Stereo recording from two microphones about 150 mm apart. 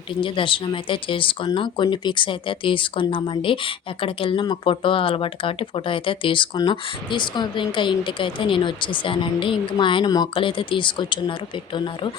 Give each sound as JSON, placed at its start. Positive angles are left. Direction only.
{"t": 0.1, "sound": "speech", "side_deg": 35}